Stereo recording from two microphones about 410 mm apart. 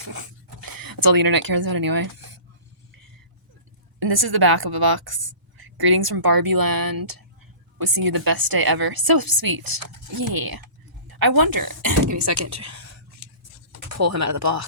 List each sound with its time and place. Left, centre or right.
0.0 s speech: right
4.0 s a woman's voice: right
13.9 s speech: right